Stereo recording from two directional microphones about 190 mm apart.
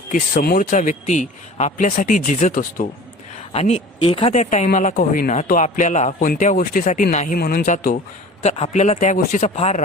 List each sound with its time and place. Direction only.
0.4 s speech: 45° left (ahead or behind)
7.3 s speech: 50° left (ahead or behind); by 9.8 s 35° left (ahead or behind)